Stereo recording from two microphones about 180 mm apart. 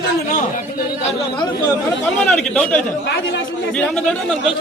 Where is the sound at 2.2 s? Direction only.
5° left (ahead or behind).